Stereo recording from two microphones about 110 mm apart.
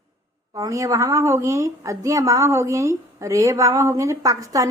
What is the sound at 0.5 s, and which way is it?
A woman's voice, 30° right (ahead or behind).